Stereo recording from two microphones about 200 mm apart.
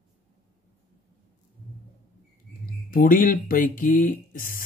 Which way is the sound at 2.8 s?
45° left (ahead or behind).